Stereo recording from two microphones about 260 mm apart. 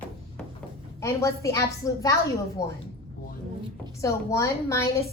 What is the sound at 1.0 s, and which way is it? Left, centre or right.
A woman's voice, centre.